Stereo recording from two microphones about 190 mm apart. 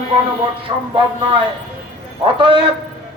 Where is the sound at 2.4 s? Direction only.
25° right (ahead or behind).